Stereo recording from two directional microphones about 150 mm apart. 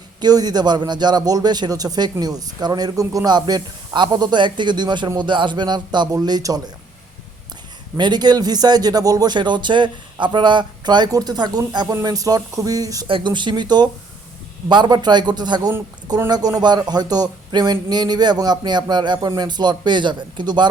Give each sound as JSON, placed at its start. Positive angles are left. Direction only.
{"t": 0.2, "sound": "a man's voice", "side_deg": -25}
{"t": 7.9, "sound": "a man's voice", "side_deg": -30}